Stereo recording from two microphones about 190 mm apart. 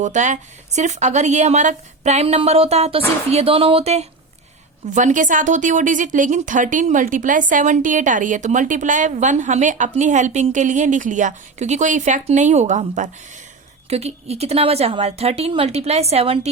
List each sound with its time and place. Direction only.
0.0 s speech: 40° right (ahead or behind)